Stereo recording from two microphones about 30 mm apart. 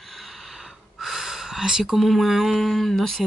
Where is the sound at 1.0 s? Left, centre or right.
Centre.